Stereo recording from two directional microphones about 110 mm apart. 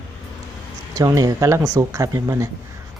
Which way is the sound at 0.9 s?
30° right (ahead or behind).